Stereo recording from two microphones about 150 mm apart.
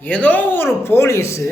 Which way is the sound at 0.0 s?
10° left (ahead or behind).